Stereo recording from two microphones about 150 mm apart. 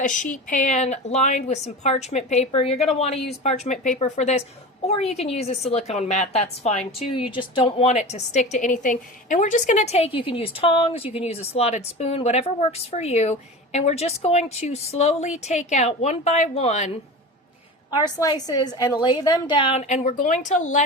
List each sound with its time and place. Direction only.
0.0 s a woman's voice: 55° left (ahead or behind)
7.0 s a woman's voice: 35° left (ahead or behind)
18.2 s a woman's voice: 25° left (ahead or behind)
19.8 s speech: 50° left (ahead or behind)